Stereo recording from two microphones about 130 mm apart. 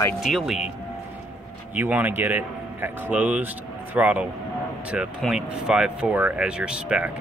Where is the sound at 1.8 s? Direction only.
10° right (ahead or behind).